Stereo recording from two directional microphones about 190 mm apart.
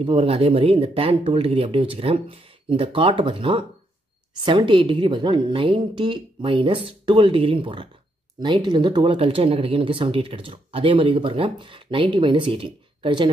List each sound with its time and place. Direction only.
0.0 s speech: 30° right (ahead or behind)